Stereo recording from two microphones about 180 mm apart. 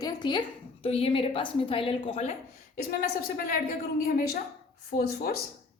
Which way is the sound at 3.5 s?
55° left (ahead or behind).